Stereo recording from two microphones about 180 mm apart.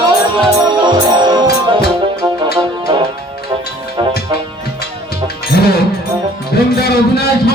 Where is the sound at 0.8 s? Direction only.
25° right (ahead or behind).